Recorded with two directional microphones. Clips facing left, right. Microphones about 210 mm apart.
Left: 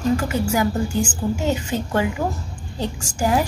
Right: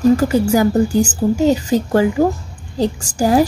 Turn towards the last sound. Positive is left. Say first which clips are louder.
# right 7 dB
turn(degrees=-35)  # may be behind; listen again after turning